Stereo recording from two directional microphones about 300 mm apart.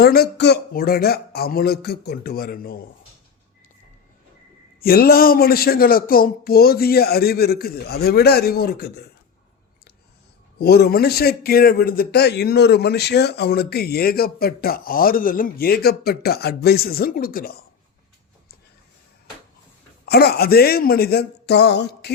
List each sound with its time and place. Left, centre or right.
0.0 s a man's voice: left
4.8 s a man's voice: left
10.6 s a man's voice: left
20.1 s a man's voice: left